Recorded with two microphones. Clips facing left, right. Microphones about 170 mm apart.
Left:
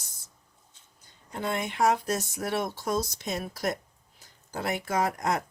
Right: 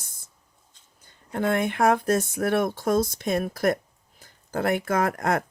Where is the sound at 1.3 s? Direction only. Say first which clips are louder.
Right 7 dB; 55° right (ahead or behind).